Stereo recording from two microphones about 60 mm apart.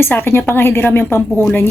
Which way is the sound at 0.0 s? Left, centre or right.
Left.